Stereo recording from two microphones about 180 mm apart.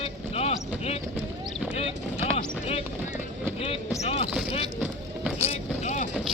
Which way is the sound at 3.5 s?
30° left (ahead or behind).